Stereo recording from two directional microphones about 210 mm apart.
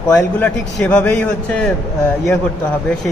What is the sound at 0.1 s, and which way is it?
A man's voice, 10° left (ahead or behind).